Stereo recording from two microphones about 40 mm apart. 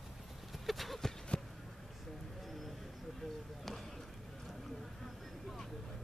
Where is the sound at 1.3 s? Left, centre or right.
Left.